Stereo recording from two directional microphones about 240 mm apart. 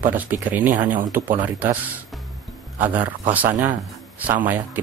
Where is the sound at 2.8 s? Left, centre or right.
Centre.